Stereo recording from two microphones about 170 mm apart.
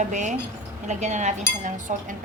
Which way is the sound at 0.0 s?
45° right (ahead or behind).